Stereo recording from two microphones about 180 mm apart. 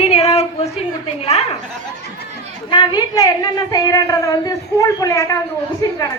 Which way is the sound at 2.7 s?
25° left (ahead or behind).